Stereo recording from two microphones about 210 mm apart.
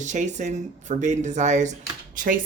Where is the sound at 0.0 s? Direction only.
35° right (ahead or behind).